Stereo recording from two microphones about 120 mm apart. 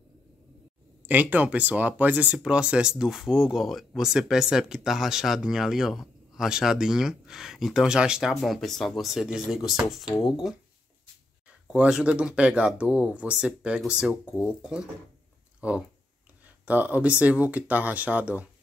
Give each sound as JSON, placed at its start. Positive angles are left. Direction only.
{"t": 1.0, "sound": "speech", "side_deg": -15}
{"t": 11.6, "sound": "speech", "side_deg": -10}
{"t": 14.2, "sound": "speech", "side_deg": 20}
{"t": 14.6, "sound": "speech", "side_deg": -5}
{"t": 16.6, "sound": "speech", "side_deg": -15}